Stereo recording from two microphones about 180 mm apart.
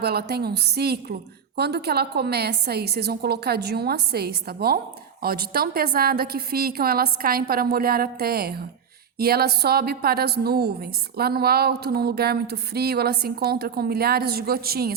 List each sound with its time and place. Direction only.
0.0 s speech: 60° right (ahead or behind)